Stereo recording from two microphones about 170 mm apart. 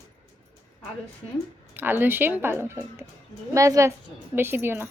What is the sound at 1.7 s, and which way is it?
A woman's voice, 10° right (ahead or behind).